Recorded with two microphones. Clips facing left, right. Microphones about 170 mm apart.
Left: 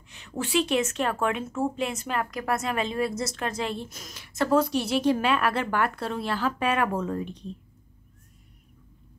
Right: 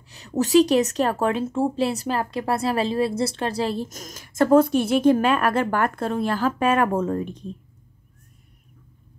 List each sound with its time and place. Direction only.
0.1 s a woman's voice: 40° right (ahead or behind)